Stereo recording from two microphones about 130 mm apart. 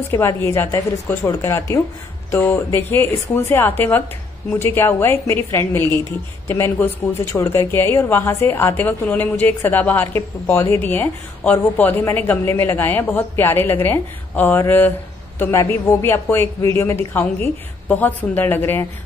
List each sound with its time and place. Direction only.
0.1 s a woman's voice: 20° left (ahead or behind)